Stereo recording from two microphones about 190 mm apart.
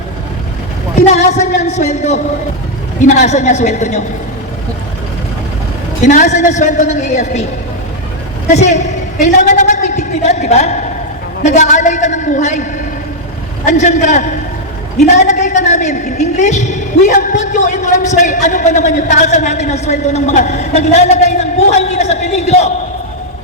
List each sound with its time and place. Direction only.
0.9 s a woman's voice: 35° left (ahead or behind)
6.0 s a woman's voice: 40° left (ahead or behind)
8.4 s a woman's voice: 35° left (ahead or behind)
13.7 s a woman's voice: 40° left (ahead or behind)